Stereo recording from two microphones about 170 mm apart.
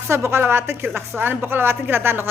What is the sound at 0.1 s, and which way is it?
Speech, 15° right (ahead or behind).